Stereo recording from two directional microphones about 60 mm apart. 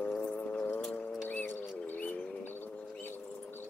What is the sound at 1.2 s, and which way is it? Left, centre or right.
Music, left.